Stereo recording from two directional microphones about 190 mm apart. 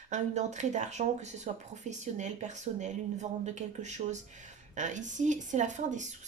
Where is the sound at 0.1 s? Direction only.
40° right (ahead or behind).